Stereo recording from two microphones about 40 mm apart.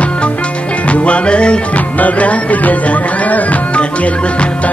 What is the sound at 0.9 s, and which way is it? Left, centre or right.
Music, left.